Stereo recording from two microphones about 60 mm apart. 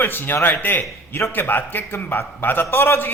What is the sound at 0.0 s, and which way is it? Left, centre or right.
Speech, left.